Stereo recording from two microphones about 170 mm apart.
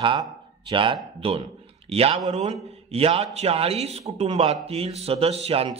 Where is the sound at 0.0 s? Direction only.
30° right (ahead or behind).